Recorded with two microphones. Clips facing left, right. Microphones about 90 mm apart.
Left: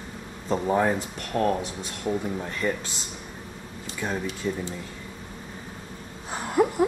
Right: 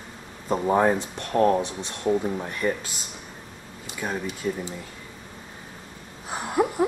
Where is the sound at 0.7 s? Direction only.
20° right (ahead or behind).